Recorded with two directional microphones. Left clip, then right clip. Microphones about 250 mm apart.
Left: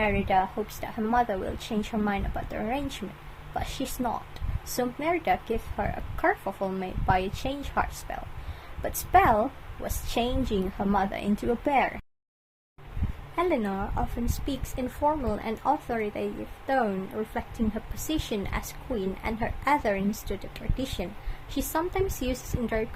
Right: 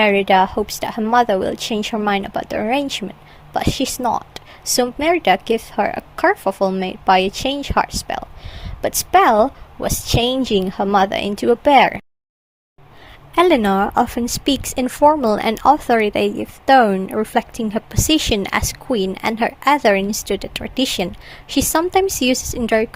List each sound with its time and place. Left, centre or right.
0.0 s a woman's voice: right
13.3 s a woman's voice: right